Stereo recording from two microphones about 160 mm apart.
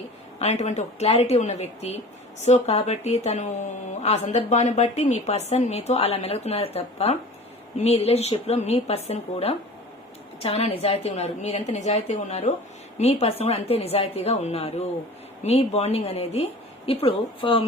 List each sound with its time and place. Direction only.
0.3 s a woman's voice: 45° left (ahead or behind)